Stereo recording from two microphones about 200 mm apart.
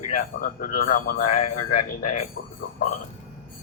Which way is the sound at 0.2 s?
45° left (ahead or behind).